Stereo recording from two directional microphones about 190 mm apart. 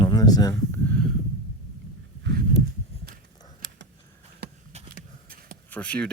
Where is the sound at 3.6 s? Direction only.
70° right (ahead or behind).